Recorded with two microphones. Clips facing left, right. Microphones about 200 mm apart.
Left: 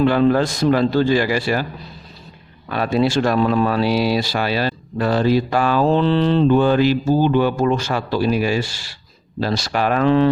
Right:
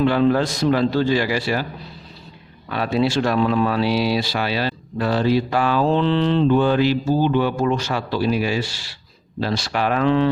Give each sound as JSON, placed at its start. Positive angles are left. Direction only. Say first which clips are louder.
{"t": 0.0, "sound": "speech", "louder": "left 2 dB", "side_deg": 50}
{"t": 2.6, "sound": "speech", "louder": "left 2 dB", "side_deg": 45}